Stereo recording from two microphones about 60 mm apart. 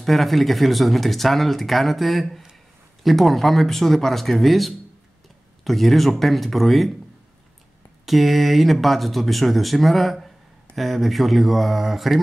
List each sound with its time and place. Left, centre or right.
0.0 s speech: centre
8.0 s speech: centre